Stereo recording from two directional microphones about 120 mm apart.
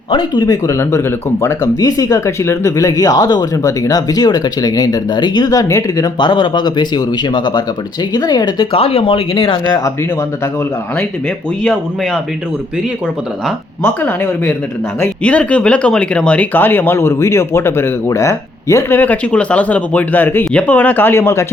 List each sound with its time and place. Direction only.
0.1 s speech: 40° left (ahead or behind)
8.8 s speech: 55° left (ahead or behind)
11.6 s speech: centre (ahead or behind)
13.8 s speech: 15° left (ahead or behind)